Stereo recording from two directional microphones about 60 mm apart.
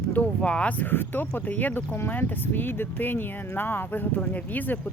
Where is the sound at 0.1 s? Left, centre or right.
Left.